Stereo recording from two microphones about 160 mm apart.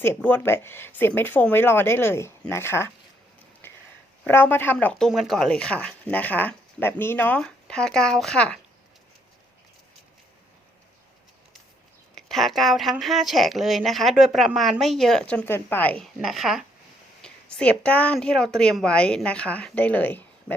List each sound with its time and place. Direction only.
0.0 s speech: 10° left (ahead or behind)
3.6 s a sound: 15° left (ahead or behind)
4.3 s speech: 10° left (ahead or behind)
12.1 s speech: centre (ahead or behind)